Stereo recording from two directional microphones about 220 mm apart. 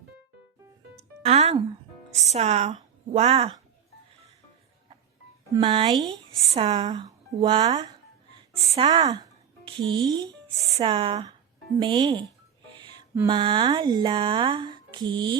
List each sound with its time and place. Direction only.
0.9 s music: 30° right (ahead or behind)
2.2 s speech: 30° right (ahead or behind)
5.5 s speech: 20° right (ahead or behind)
12.7 s music: 20° right (ahead or behind)
13.1 s speech: 20° right (ahead or behind)